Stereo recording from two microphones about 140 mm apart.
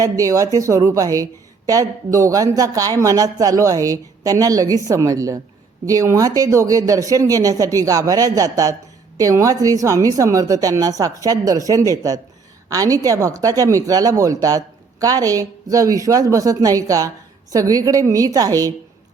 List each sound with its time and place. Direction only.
0.0 s a woman's voice: 25° right (ahead or behind)